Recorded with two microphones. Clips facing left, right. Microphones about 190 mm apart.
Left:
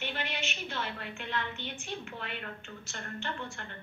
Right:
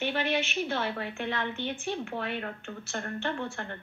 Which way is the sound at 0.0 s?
50° right (ahead or behind).